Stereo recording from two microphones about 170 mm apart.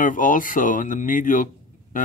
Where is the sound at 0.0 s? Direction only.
50° left (ahead or behind).